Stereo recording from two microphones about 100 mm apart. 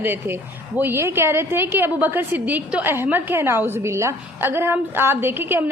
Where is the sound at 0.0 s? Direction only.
20° right (ahead or behind).